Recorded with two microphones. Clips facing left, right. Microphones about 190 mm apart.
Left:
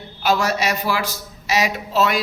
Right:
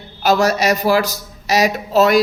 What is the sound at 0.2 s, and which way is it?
A man's voice, 40° right (ahead or behind).